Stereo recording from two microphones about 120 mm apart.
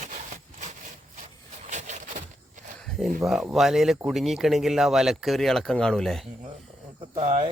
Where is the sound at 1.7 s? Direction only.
80° right.